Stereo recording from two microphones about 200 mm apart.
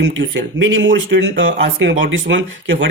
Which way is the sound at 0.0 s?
70° right (ahead or behind).